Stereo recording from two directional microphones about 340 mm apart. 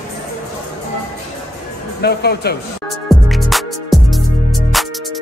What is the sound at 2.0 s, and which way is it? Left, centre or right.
Speech, left.